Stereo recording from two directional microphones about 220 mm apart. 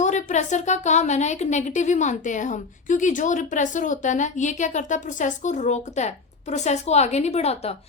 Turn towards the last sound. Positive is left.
turn(degrees=30)  # may be behind; listen again after turning